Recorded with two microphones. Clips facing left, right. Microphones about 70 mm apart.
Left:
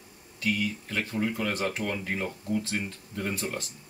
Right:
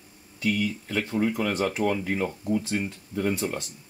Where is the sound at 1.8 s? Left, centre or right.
Right.